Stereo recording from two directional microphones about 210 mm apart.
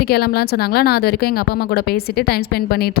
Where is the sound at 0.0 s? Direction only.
50° left (ahead or behind).